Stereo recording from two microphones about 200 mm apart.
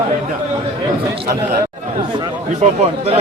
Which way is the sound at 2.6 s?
30° right (ahead or behind).